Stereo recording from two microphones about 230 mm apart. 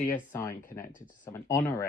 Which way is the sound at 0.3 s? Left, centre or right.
Centre.